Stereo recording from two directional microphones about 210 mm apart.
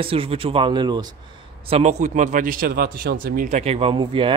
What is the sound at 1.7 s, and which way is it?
Speech, 30° right (ahead or behind).